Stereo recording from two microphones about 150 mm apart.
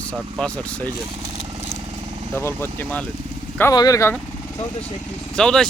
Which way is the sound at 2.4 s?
15° left (ahead or behind).